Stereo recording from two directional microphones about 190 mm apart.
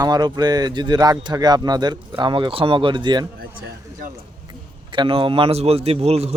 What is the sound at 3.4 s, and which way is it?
Speech, 55° right (ahead or behind).